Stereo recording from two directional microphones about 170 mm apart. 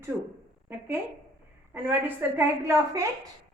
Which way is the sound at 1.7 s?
10° right (ahead or behind).